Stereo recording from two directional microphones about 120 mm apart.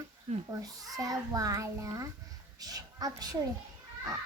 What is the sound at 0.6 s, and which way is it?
A child's voice, 30° right (ahead or behind).